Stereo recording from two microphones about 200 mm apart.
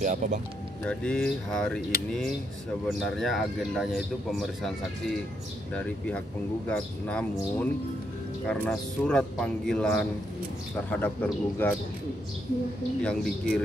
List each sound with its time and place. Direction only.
0.0 s speech: 35° right (ahead or behind)
0.8 s speech: 5° left (ahead or behind)
5.8 s a man's voice: 5° left (ahead or behind)
13.0 s speech: 5° left (ahead or behind)